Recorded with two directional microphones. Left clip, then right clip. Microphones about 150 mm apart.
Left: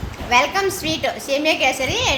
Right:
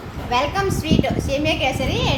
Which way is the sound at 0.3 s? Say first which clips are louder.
Left 3 dB; 20° left (ahead or behind).